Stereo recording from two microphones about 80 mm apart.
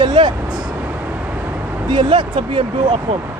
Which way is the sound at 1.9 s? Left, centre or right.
Right.